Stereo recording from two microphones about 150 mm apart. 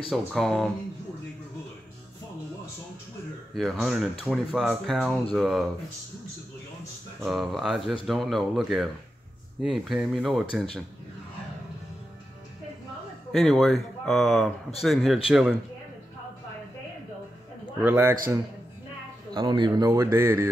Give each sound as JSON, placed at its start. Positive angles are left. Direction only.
{"t": 0.1, "sound": "speech", "side_deg": 0}
{"t": 3.5, "sound": "speech", "side_deg": 0}
{"t": 7.2, "sound": "speech", "side_deg": 0}
{"t": 13.3, "sound": "speech", "side_deg": 0}
{"t": 17.8, "sound": "mantra", "side_deg": -15}
{"t": 19.3, "sound": "a man's voice", "side_deg": -30}
{"t": 19.9, "sound": "mantra", "side_deg": -15}